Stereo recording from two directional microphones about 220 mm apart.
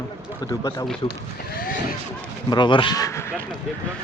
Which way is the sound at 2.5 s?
20° left (ahead or behind).